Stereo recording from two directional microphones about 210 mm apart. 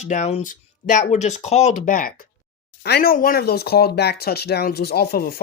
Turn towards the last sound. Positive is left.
turn(degrees=50)  # may be behind; listen again after turning